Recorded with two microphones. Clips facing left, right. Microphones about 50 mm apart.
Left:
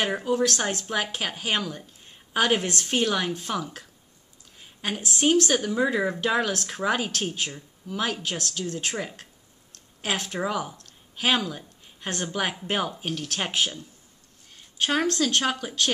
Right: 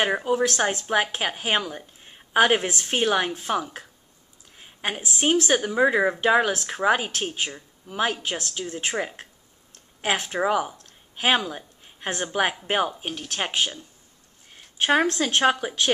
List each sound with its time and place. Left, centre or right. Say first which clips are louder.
0.0 s a woman's voice: right 2 dB; centre
14.5 s a woman's voice: right 4 dB; right